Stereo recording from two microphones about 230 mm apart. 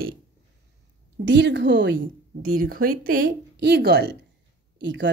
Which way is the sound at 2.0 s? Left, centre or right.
Right.